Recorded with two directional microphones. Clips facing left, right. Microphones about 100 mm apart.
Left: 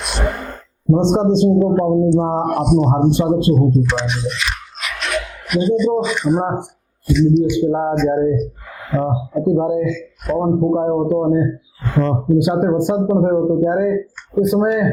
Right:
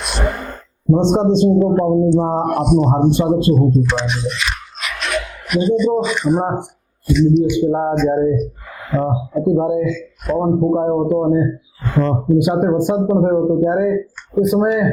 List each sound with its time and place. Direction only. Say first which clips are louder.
0.0 s sigh: right 1 dB; 15° right (ahead or behind)
1.3 s a man's voice: even; 10° right (ahead or behind)
1.5 s speech: even; 25° right (ahead or behind)
3.8 s a sound: right 1 dB; 10° right (ahead or behind)
6.0 s speech: even; 15° right (ahead or behind)
7.1 s a man's voice: even; 10° right (ahead or behind)
7.7 s speech: even; 25° right (ahead or behind)
10.3 s speech: even; 30° right (ahead or behind)
12.4 s a man's voice: right 1 dB; 15° right (ahead or behind)
13.0 s speech: even; 25° right (ahead or behind)